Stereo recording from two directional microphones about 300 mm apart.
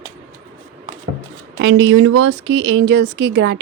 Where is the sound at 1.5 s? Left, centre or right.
Right.